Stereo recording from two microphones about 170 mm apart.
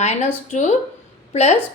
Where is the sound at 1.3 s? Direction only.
40° left (ahead or behind).